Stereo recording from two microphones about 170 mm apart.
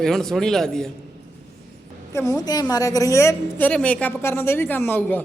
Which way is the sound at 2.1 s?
15° left (ahead or behind).